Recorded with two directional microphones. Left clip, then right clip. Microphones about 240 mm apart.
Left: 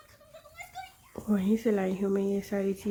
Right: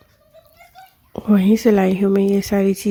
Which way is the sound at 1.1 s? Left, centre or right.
Right.